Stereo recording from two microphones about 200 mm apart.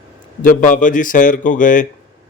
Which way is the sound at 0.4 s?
40° left (ahead or behind).